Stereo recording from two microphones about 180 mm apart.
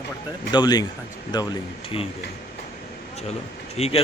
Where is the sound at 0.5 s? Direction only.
20° left (ahead or behind).